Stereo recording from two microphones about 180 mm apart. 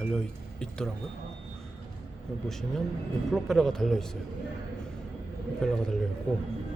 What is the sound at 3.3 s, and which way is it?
Speech, centre (ahead or behind).